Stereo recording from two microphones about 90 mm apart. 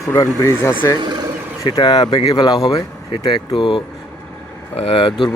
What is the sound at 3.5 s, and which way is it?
Speech, 70° left (ahead or behind).